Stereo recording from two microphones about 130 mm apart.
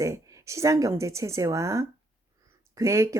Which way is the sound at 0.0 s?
25° right (ahead or behind).